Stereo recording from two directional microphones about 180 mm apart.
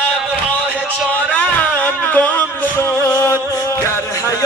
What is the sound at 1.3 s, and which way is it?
Music, 10° left (ahead or behind).